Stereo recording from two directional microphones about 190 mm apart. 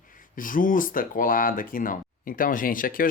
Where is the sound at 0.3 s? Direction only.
45° left (ahead or behind).